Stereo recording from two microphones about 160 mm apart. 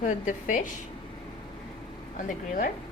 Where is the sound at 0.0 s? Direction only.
55° left (ahead or behind).